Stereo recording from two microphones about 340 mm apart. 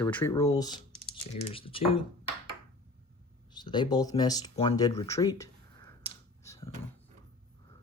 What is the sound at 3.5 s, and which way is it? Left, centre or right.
Speech, centre.